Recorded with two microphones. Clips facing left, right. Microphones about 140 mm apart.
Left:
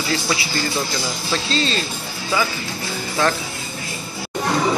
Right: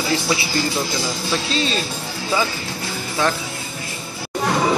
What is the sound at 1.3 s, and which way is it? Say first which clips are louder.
Speech: left 1 dB; 10° right (ahead or behind).